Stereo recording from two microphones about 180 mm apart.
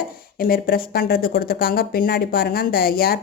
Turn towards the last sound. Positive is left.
turn(degrees=55)  # may be behind; listen again after turning